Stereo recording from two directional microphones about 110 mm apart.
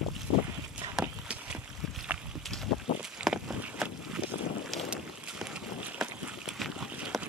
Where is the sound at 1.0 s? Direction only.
10° right (ahead or behind).